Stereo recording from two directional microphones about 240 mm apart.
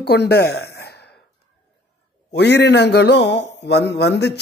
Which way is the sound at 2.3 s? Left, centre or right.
Left.